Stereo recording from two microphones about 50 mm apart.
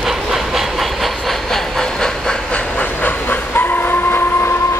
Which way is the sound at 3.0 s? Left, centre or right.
Left.